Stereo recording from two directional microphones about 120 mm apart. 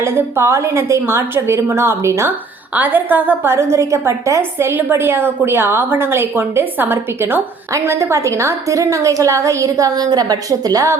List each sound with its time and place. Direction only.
0.0 s a woman's voice: 20° right (ahead or behind)